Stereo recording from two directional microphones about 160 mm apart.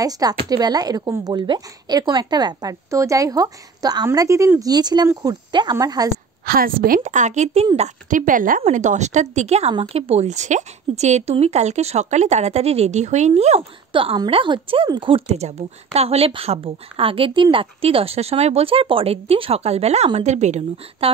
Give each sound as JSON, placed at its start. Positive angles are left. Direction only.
{"t": 0.0, "sound": "speech", "side_deg": -25}
{"t": 6.4, "sound": "a woman's voice", "side_deg": -65}